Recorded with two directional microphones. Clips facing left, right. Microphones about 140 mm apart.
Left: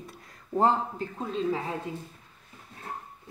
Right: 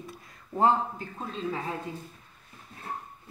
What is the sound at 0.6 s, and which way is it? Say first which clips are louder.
Speech: even; 35° left (ahead or behind).